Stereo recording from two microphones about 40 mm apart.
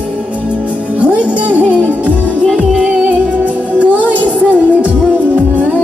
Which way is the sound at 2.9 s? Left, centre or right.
Right.